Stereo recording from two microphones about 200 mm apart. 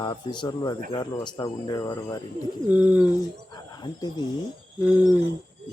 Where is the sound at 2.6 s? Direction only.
5° right (ahead or behind).